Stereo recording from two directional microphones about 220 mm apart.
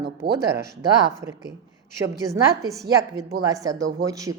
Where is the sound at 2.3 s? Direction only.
15° right (ahead or behind).